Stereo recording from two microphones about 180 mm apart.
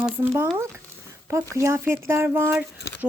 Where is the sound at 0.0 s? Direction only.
10° right (ahead or behind).